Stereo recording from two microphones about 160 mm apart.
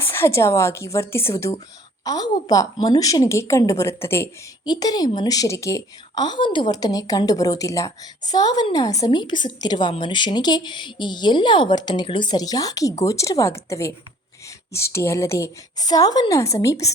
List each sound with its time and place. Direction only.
0.0 s a woman's voice: 15° left (ahead or behind)